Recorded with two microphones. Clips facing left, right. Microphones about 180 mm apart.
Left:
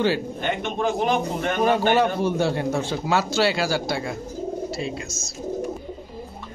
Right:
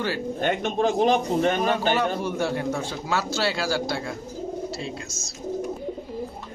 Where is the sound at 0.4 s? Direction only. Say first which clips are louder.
Right 2 dB; 40° right (ahead or behind).